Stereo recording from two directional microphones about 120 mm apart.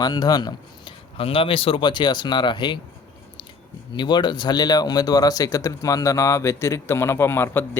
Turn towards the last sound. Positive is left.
turn(degrees=20)  # may be behind; listen again after turning